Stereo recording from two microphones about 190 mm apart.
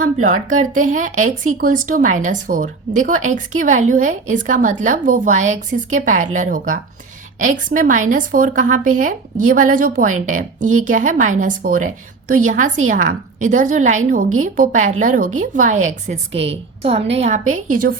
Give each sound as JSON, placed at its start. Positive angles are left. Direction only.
{"t": 0.0, "sound": "a woman's voice", "side_deg": -40}